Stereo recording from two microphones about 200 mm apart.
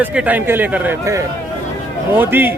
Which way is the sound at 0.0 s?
5° right (ahead or behind).